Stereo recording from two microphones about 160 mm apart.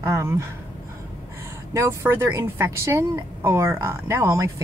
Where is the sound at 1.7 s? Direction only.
15° right (ahead or behind).